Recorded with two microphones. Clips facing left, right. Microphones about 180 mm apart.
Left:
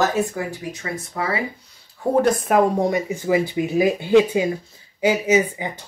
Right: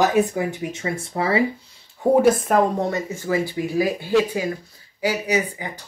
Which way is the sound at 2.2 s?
5° right (ahead or behind).